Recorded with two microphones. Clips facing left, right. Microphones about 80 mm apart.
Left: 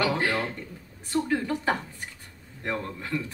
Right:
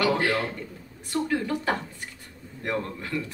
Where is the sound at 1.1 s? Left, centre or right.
Left.